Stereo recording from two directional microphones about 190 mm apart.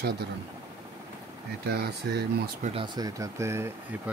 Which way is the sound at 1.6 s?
55° right (ahead or behind).